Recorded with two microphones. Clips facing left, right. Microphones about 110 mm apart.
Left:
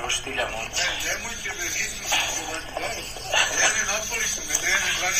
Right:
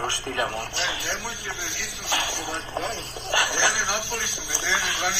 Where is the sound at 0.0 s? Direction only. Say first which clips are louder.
Right 2 dB; 20° right (ahead or behind).